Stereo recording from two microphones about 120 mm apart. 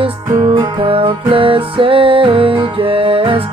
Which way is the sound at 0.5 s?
45° right (ahead or behind).